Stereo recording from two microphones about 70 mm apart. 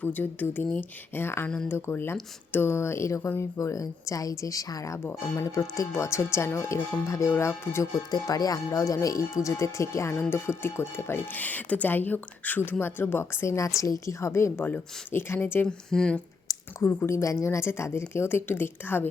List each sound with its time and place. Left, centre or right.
0.0 s a woman's voice: left
7.9 s a woman's voice: left
11.3 s a woman's voice: left
13.7 s a woman's voice: left
15.6 s speech: centre
16.8 s a woman's voice: left